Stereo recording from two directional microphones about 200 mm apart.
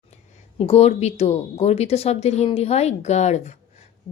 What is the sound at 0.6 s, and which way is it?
Speech, 30° left (ahead or behind).